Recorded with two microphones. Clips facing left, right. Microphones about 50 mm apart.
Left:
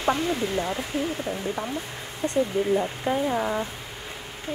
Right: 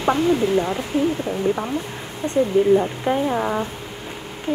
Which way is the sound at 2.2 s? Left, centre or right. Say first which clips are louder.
Right 3 dB; centre.